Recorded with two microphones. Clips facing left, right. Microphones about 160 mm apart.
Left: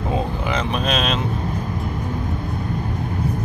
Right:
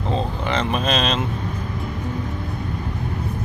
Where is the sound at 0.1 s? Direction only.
5° left (ahead or behind).